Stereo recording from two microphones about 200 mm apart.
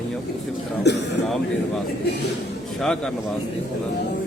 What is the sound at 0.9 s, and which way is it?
Speech, 60° left (ahead or behind).